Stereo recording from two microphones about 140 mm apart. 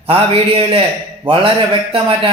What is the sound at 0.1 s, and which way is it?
A man's voice, 40° right (ahead or behind).